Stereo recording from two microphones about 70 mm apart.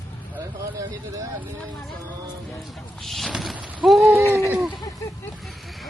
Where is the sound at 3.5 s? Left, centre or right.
Centre.